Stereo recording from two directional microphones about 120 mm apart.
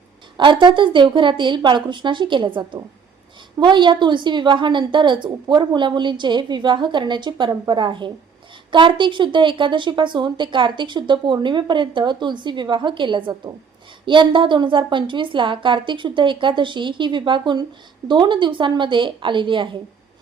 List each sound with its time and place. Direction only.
0.3 s a woman's voice: 40° right (ahead or behind)